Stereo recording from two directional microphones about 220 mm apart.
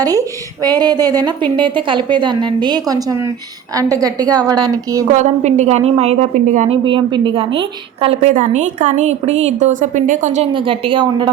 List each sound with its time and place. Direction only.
0.0 s a woman's voice: 15° right (ahead or behind)
5.1 s a woman's voice: 30° right (ahead or behind)